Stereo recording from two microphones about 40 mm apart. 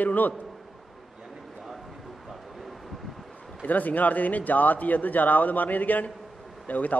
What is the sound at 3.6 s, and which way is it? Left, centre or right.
A woman's voice, left.